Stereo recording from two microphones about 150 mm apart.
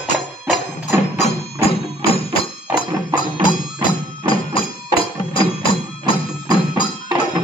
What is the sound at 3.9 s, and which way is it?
Music, 35° left (ahead or behind).